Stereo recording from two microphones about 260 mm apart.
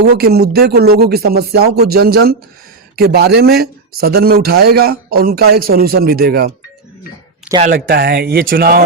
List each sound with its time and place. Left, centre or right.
0.0 s speech: right
7.7 s speech: right